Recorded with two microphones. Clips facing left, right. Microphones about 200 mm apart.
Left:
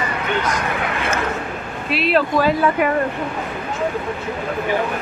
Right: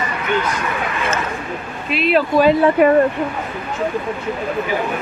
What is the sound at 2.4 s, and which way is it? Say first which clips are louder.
Speech: right 4 dB; 20° right (ahead or behind).